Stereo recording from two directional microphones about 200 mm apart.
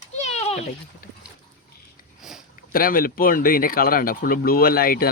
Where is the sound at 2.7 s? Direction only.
45° left (ahead or behind).